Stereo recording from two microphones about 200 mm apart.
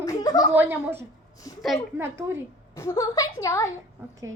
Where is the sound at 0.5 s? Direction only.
10° right (ahead or behind).